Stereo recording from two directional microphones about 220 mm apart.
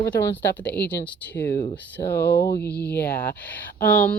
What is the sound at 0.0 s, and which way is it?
Speech, 10° left (ahead or behind).